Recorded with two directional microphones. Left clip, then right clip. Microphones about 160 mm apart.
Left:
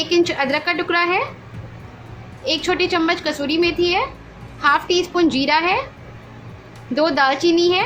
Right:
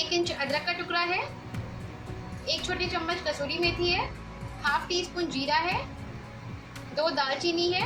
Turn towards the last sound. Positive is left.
turn(degrees=55)  # may be behind; listen again after turning